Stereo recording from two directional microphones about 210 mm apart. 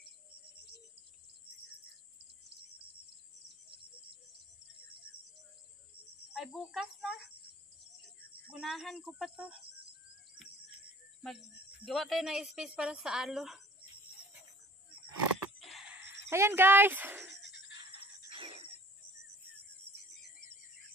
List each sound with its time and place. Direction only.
6.3 s speech: centre (ahead or behind)
8.5 s speech: centre (ahead or behind)
11.2 s speech: centre (ahead or behind)
15.3 s a sound: centre (ahead or behind)
17.4 s frog: 55° left (ahead or behind)
18.3 s cricket: 25° right (ahead or behind)